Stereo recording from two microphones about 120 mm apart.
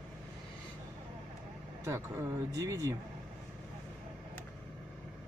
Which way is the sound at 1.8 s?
25° right (ahead or behind).